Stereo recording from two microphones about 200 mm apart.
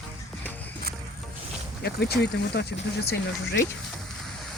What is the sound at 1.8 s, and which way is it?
Speech, 55° left (ahead or behind).